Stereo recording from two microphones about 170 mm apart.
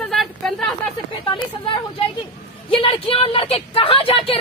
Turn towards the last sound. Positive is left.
turn(degrees=35)  # may be behind; listen again after turning